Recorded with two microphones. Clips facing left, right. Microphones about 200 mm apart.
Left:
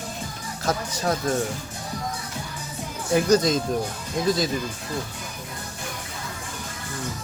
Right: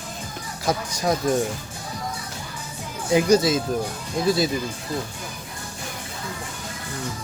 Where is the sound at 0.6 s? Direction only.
15° right (ahead or behind).